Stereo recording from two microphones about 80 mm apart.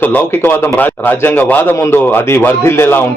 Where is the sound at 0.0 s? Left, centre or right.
Left.